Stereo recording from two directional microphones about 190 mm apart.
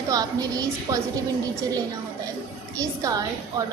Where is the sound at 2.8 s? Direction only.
20° right (ahead or behind).